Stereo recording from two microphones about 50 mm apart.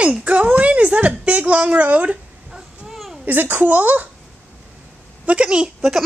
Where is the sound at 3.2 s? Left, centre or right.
Right.